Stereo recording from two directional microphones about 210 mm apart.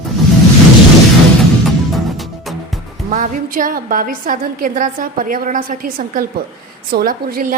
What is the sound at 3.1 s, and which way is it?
A woman's voice, 40° right (ahead or behind).